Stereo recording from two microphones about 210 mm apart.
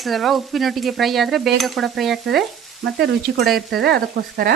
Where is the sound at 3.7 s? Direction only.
50° right (ahead or behind).